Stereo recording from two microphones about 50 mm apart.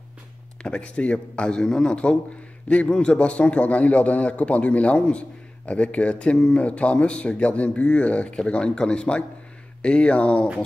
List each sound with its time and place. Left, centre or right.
0.6 s a man's voice: centre